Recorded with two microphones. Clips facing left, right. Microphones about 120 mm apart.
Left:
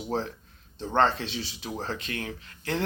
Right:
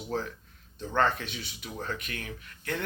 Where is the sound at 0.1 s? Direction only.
30° left (ahead or behind).